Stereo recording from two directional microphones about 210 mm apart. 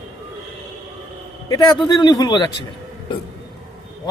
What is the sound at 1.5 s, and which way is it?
Speech, 20° left (ahead or behind).